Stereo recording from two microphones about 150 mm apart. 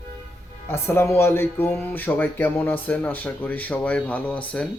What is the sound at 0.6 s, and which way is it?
Speech, 15° left (ahead or behind).